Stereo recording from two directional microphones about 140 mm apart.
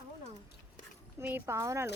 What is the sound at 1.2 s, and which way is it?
Speech, 15° right (ahead or behind).